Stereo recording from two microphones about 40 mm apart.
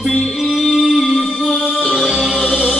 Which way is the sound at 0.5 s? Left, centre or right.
Centre.